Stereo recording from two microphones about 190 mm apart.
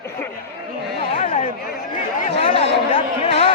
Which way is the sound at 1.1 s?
30° left (ahead or behind).